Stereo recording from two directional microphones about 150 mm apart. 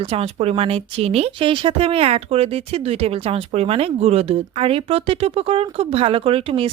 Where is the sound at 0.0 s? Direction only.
40° right (ahead or behind).